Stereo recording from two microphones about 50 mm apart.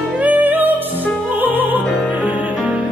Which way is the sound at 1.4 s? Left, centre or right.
Right.